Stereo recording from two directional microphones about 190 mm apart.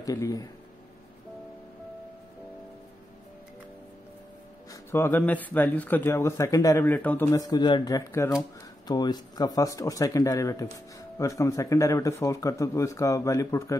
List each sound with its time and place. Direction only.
0.0 s speech: 20° left (ahead or behind)
4.9 s a man's voice: 10° left (ahead or behind)